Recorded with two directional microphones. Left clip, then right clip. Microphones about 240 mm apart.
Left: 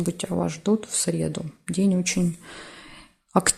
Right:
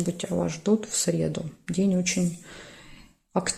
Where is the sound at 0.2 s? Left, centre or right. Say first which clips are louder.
Left 1 dB; centre.